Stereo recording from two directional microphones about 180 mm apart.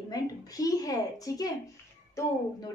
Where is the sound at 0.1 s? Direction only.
20° left (ahead or behind).